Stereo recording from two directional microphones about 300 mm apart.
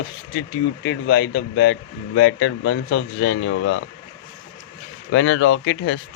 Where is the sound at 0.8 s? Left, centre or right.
Left.